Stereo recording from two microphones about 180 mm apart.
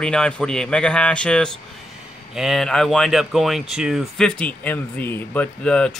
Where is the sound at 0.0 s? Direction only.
5° left (ahead or behind).